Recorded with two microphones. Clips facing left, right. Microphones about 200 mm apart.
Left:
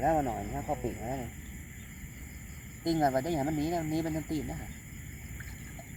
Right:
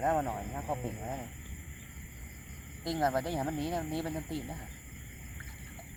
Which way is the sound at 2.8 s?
20° left (ahead or behind).